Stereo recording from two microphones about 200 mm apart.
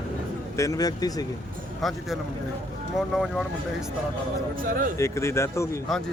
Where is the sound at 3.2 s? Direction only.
Centre (ahead or behind).